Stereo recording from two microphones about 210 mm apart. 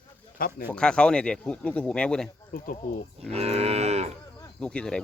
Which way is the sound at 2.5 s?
45° left (ahead or behind).